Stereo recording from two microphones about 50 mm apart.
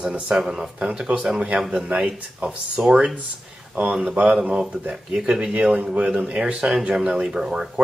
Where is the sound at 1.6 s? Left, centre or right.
Centre.